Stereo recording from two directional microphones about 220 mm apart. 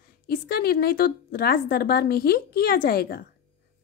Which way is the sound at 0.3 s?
45° left (ahead or behind).